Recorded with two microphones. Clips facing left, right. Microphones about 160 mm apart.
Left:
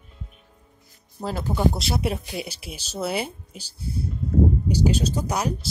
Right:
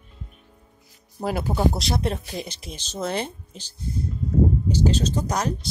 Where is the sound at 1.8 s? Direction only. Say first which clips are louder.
Even; 5° left (ahead or behind).